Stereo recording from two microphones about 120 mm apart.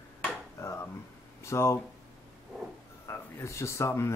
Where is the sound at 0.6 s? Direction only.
25° left (ahead or behind).